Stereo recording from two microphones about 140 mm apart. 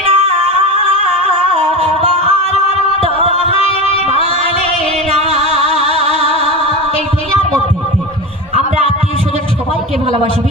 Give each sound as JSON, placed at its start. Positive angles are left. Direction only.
{"t": 0.0, "sound": "music", "side_deg": -45}
{"t": 3.5, "sound": "music", "side_deg": 40}
{"t": 4.1, "sound": "music", "side_deg": -50}